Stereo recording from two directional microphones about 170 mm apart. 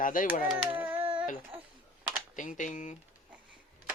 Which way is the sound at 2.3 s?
50° left (ahead or behind).